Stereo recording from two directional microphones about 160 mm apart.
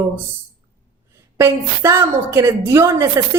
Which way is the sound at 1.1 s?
15° right (ahead or behind).